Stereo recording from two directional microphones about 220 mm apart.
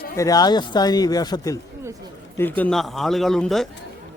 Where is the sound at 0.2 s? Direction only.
15° left (ahead or behind).